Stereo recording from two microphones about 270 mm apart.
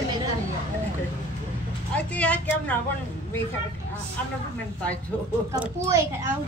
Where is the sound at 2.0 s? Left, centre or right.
Centre.